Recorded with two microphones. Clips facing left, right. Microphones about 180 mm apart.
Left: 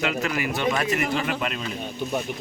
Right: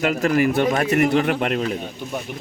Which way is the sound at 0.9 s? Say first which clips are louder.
Right 7 dB; 60° right (ahead or behind).